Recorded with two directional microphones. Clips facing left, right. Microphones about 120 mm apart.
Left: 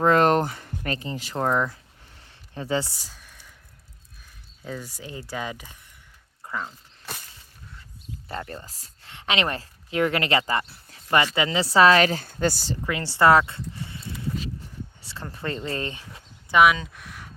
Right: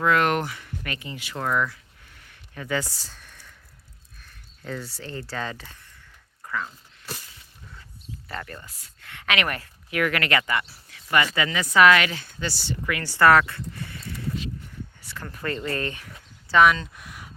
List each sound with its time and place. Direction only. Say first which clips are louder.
0.0 s speech: left 3 dB; 35° left (ahead or behind)
2.0 s a sound: right 1 dB; 30° left (ahead or behind)
3.0 s a sound: right 1 dB; 5° left (ahead or behind)
4.6 s speech: right 1 dB; 10° left (ahead or behind)
6.4 s a sound: right 1 dB; 25° left (ahead or behind)
8.3 s speech: left 3 dB; 30° left (ahead or behind); by 12.7 s 45° left (ahead or behind)
12.8 s speech: even; 25° left (ahead or behind)
15.0 s speech: right 1 dB; 25° left (ahead or behind)
16.5 s speech: even; 10° left (ahead or behind)